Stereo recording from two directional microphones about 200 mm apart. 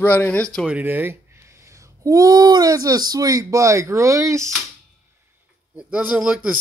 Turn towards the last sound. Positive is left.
turn(degrees=-5)  # may be behind; listen again after turning